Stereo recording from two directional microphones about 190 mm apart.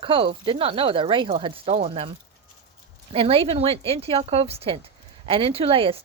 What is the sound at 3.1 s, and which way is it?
A woman's voice, 30° right (ahead or behind).